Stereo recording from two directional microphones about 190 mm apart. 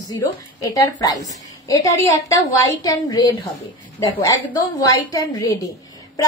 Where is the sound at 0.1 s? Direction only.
15° left (ahead or behind).